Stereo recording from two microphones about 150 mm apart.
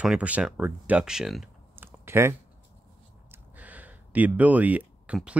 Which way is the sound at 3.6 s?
10° right (ahead or behind).